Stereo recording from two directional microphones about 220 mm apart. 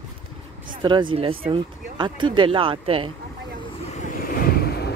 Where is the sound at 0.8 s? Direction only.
20° right (ahead or behind).